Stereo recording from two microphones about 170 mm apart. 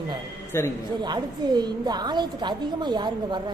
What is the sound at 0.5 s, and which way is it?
Speech, 15° left (ahead or behind).